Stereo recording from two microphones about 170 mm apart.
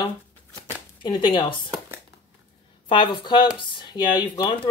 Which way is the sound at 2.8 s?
30° left (ahead or behind).